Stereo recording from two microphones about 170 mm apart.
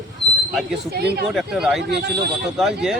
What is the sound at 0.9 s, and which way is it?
Speech, 70° right (ahead or behind).